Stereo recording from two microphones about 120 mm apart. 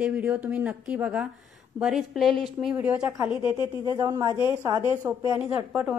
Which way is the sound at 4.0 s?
30° right (ahead or behind).